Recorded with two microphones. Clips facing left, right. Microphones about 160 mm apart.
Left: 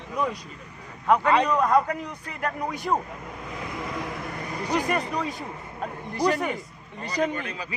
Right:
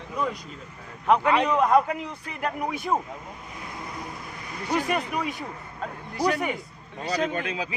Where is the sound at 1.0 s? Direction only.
20° right (ahead or behind).